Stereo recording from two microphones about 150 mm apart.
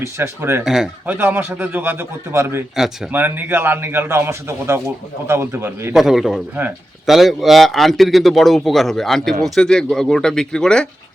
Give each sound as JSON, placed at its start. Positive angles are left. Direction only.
{"t": 0.0, "sound": "a man's voice", "side_deg": -15}
{"t": 0.6, "sound": "a man's voice", "side_deg": -5}
{"t": 5.9, "sound": "a man's voice", "side_deg": 0}